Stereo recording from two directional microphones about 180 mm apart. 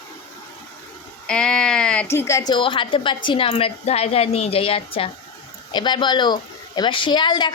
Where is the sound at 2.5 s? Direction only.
25° left (ahead or behind).